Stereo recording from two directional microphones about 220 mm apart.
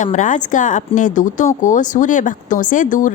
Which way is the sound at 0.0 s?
35° left (ahead or behind).